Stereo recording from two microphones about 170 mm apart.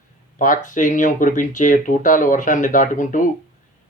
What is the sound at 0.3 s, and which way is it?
Speech, 50° left (ahead or behind).